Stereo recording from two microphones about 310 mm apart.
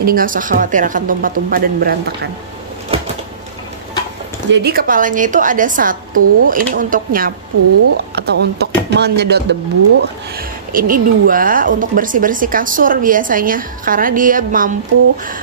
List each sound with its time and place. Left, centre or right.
0.0 s speech: right
4.5 s speech: right